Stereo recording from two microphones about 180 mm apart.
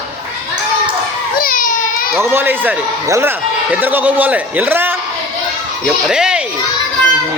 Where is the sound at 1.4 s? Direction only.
50° left (ahead or behind).